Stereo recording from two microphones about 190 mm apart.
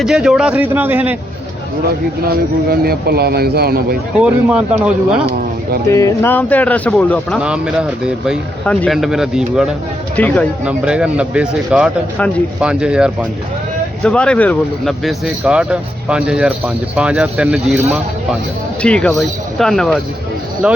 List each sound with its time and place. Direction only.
0.0 s a man's voice: 5° right (ahead or behind)
2.6 s a man's voice: 55° right (ahead or behind)
4.2 s speech: 5° right (ahead or behind)
5.9 s speech: 15° left (ahead or behind)
7.3 s speech: 5° right (ahead or behind)
10.2 s speech: 10° left (ahead or behind)
10.7 s speech: 5° right (ahead or behind)
14.0 s speech: 5° left (ahead or behind)
18.8 s speech: 5° left (ahead or behind)